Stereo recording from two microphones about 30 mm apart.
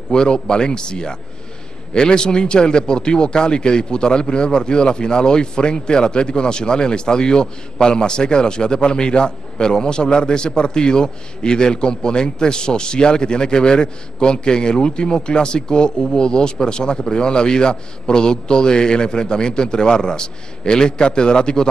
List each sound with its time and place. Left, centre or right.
0.1 s a man's voice: left